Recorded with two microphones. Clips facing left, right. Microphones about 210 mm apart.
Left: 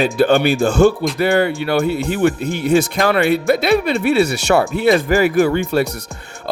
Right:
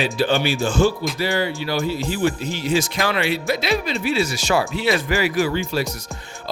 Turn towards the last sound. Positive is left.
turn(degrees=55)  # may be behind; listen again after turning